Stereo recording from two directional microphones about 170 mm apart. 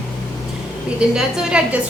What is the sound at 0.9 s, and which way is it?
Speech, 5° right (ahead or behind).